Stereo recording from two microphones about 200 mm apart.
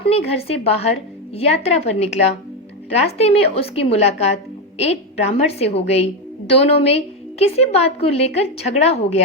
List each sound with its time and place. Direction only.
0.0 s a woman's voice: 30° left (ahead or behind)